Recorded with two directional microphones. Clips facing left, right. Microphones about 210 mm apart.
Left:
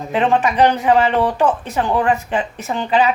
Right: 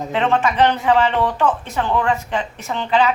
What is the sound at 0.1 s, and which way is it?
A woman's voice, 15° left (ahead or behind).